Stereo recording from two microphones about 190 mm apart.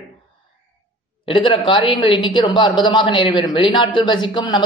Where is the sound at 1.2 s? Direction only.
25° left (ahead or behind).